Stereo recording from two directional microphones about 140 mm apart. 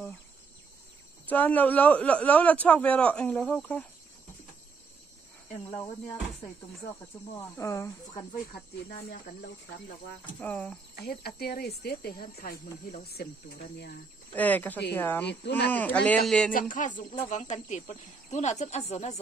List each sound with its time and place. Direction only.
1.2 s a man's voice: 10° left (ahead or behind)
7.3 s speech: 20° left (ahead or behind)
10.4 s a man's voice: 15° left (ahead or behind)
11.0 s speech: 90° left
14.3 s a man's voice: 10° left (ahead or behind)
16.5 s music: 70° left (ahead or behind)
17.2 s speech: 55° left (ahead or behind)